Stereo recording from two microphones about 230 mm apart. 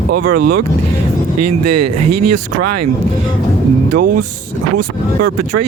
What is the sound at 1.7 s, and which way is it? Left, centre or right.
Speech, right.